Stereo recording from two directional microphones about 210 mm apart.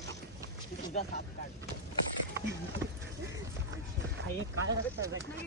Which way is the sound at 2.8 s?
15° right (ahead or behind).